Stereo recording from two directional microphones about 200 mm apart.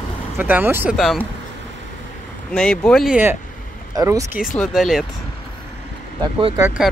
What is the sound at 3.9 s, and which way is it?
Speech, 15° right (ahead or behind).